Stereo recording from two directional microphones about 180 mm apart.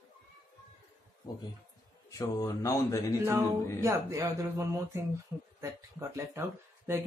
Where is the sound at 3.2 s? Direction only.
15° right (ahead or behind).